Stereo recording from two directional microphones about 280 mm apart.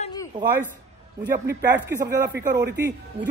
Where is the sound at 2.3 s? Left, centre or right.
Right.